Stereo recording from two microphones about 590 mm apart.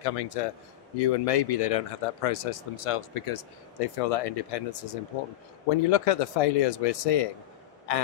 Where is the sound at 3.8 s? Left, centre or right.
Left.